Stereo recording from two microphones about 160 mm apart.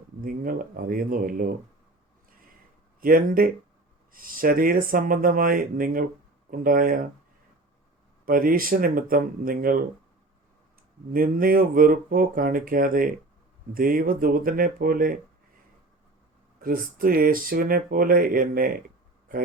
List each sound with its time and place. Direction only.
0.2 s speech: 60° right (ahead or behind)
3.0 s speech: 65° right (ahead or behind)
8.2 s speech: 65° right (ahead or behind)
11.1 s speech: 65° right (ahead or behind)
16.6 s speech: 65° right (ahead or behind)